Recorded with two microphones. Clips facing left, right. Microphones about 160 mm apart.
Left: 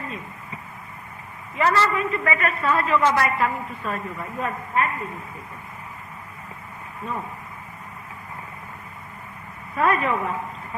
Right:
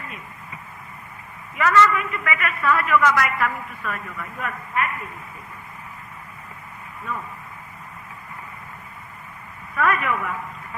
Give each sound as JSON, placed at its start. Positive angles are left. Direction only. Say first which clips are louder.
{"t": 1.5, "sound": "a man's voice", "louder": "right 2 dB", "side_deg": 30}
{"t": 7.0, "sound": "speech", "louder": "left 1 dB", "side_deg": 30}
{"t": 9.7, "sound": "a man's voice", "louder": "left 1 dB", "side_deg": 30}